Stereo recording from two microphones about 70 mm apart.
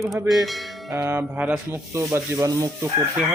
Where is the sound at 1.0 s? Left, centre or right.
Right.